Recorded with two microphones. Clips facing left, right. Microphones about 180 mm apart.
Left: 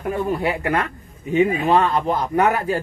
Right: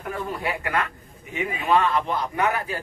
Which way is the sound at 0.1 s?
25° left (ahead or behind).